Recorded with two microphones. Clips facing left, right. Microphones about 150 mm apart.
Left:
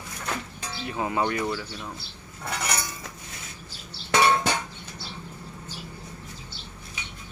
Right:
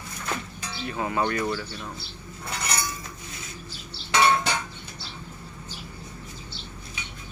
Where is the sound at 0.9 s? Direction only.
15° left (ahead or behind).